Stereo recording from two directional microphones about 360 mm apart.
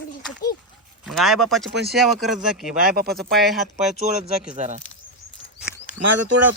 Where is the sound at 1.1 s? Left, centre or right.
Centre.